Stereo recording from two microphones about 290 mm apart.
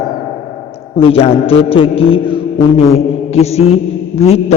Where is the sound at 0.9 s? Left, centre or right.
Centre.